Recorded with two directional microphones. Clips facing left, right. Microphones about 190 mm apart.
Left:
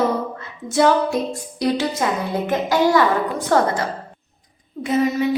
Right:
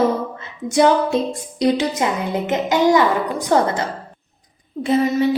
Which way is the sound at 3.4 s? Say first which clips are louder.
Right 1 dB; 20° right (ahead or behind).